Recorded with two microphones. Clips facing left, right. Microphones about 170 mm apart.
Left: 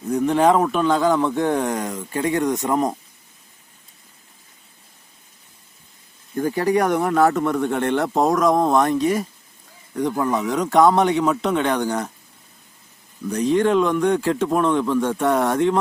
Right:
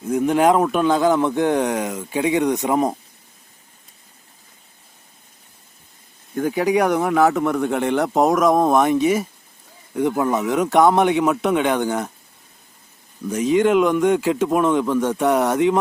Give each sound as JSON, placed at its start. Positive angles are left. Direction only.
{"t": 0.0, "sound": "a man's voice", "side_deg": 0}
{"t": 6.3, "sound": "a man's voice", "side_deg": 0}
{"t": 8.7, "sound": "speech", "side_deg": -15}
{"t": 10.0, "sound": "speech", "side_deg": -15}
{"t": 10.4, "sound": "a man's voice", "side_deg": 0}
{"t": 13.2, "sound": "a man's voice", "side_deg": 0}